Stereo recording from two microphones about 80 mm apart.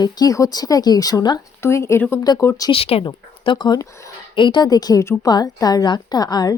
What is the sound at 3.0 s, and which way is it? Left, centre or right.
A woman's voice, left.